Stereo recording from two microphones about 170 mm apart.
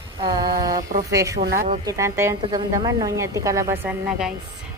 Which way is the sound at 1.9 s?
15° right (ahead or behind).